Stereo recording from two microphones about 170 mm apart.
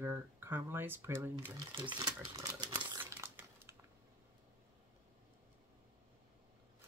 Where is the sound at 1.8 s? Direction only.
25° right (ahead or behind).